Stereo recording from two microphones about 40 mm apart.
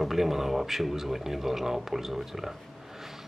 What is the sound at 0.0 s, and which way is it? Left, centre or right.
Speech, centre.